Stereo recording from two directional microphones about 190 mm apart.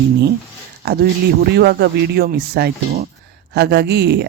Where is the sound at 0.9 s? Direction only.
55° right (ahead or behind).